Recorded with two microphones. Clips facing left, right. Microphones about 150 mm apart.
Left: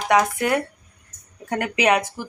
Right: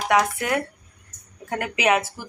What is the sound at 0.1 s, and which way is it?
Speech, centre (ahead or behind).